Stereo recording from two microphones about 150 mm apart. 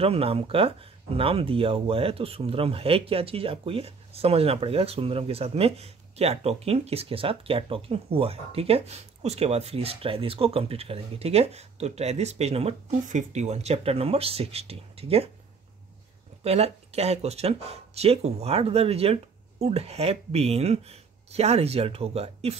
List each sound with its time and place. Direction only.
0.0 s speech: 40° right (ahead or behind)
16.4 s speech: 45° right (ahead or behind)